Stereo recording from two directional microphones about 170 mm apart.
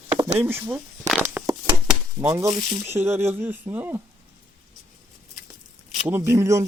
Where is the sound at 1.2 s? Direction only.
10° right (ahead or behind).